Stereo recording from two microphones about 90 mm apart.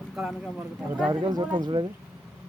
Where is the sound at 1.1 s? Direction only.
55° right (ahead or behind).